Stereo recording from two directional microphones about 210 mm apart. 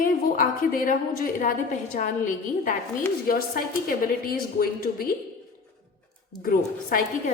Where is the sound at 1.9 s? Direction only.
40° left (ahead or behind).